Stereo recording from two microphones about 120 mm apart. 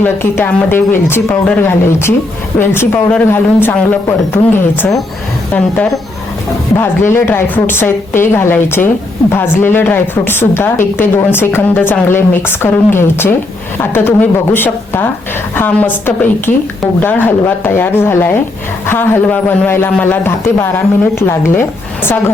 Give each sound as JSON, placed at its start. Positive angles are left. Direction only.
{"t": 0.0, "sound": "a woman's voice", "side_deg": 15}
{"t": 6.7, "sound": "a woman's voice", "side_deg": 20}